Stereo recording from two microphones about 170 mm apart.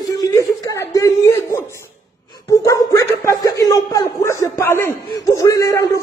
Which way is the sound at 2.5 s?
20° left (ahead or behind).